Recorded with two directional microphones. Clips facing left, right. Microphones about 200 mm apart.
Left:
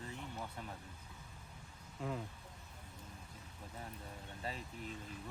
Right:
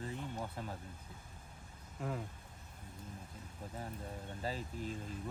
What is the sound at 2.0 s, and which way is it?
Speech, centre (ahead or behind).